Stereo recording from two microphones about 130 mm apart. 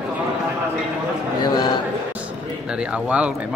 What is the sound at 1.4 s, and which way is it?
Speech, 35° left (ahead or behind).